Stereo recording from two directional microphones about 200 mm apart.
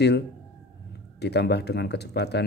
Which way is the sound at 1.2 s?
55° left (ahead or behind).